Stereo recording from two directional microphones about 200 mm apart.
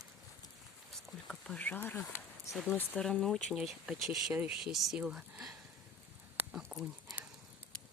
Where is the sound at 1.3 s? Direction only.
5° left (ahead or behind).